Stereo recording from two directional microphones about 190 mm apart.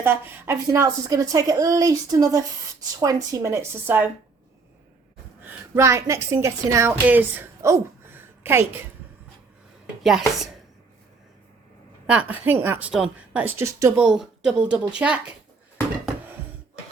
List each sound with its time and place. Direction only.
0.0 s speech: 10° right (ahead or behind)
5.5 s a woman's voice: 15° right (ahead or behind)
10.0 s speech: centre (ahead or behind)
12.0 s speech: 5° right (ahead or behind)